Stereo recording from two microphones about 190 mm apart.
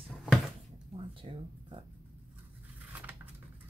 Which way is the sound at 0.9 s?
25° right (ahead or behind).